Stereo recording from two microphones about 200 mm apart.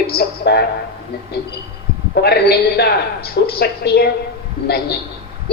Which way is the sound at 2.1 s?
55° left (ahead or behind).